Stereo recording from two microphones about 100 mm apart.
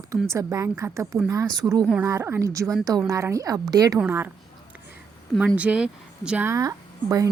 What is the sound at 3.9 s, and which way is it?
Speech, 20° right (ahead or behind).